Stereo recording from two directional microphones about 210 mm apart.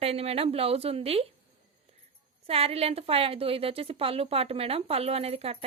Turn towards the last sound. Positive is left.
turn(degrees=-30)  # may be behind; listen again after turning